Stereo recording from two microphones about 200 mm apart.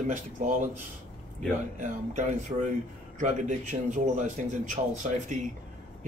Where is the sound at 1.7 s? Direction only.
40° right (ahead or behind).